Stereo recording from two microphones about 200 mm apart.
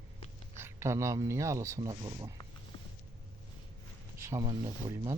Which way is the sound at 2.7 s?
25° left (ahead or behind).